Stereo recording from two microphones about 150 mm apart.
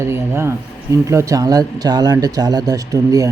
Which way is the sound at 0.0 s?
15° right (ahead or behind).